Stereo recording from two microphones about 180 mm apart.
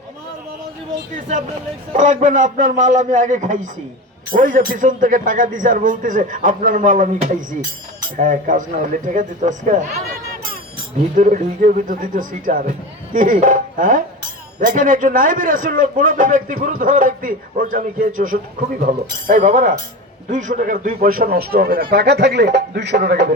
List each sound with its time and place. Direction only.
2.0 s a man's voice: 45° right (ahead or behind); by 23.3 s 65° right (ahead or behind)